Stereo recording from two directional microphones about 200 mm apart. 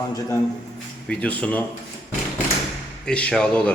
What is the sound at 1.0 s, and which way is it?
Speech, 5° left (ahead or behind).